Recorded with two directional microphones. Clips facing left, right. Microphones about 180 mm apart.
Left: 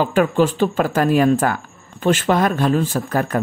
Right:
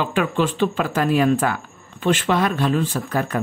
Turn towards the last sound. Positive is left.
turn(degrees=45)  # may be behind; listen again after turning